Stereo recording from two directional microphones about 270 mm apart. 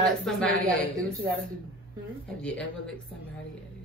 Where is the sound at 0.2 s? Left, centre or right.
Centre.